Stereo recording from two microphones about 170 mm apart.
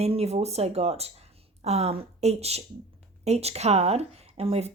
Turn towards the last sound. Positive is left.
turn(degrees=-35)  # may be behind; listen again after turning